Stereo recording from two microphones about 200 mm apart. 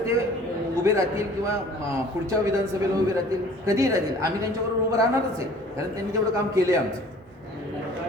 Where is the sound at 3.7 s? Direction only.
15° right (ahead or behind).